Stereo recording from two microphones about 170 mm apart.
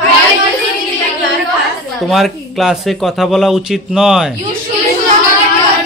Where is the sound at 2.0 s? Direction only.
Centre (ahead or behind).